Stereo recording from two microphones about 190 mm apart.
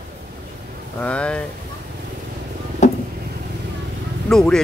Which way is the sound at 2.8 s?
40° left (ahead or behind).